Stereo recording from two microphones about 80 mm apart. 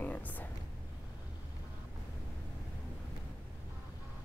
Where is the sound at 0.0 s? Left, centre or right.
Left.